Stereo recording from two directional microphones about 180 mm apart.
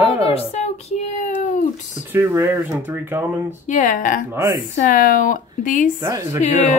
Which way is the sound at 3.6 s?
45° left (ahead or behind).